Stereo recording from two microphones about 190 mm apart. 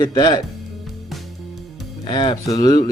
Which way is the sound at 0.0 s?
20° left (ahead or behind).